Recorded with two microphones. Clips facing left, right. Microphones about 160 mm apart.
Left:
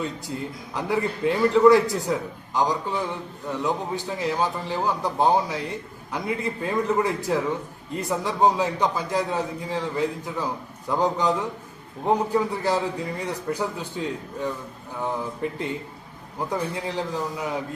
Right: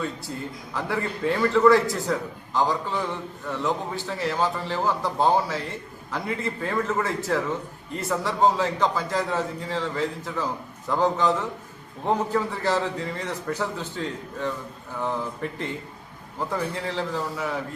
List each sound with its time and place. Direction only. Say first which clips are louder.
0.0 s a man's voice: left 1 dB; 15° left (ahead or behind)